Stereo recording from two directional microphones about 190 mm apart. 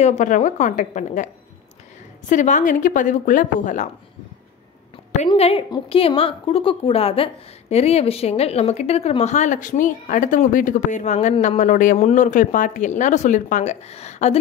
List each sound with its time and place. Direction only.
0.0 s speech: 40° left (ahead or behind)
5.1 s speech: 35° left (ahead or behind)